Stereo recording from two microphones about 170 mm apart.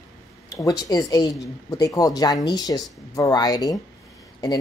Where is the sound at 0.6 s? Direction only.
20° left (ahead or behind).